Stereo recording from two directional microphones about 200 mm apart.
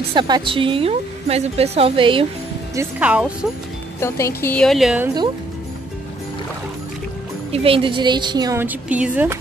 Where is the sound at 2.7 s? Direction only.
10° right (ahead or behind).